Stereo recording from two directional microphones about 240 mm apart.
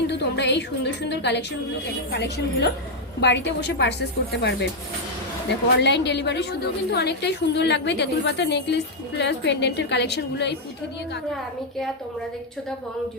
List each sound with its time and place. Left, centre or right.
0.1 s a woman's voice: left